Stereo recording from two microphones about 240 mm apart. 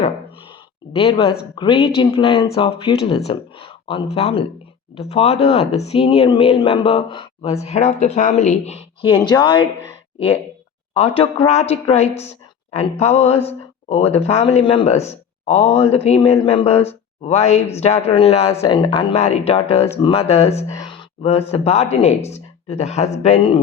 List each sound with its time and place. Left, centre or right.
0.9 s speech: left
10.9 s speech: left